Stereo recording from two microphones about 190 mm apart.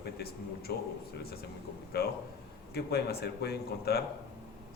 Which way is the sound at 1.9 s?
55° left (ahead or behind).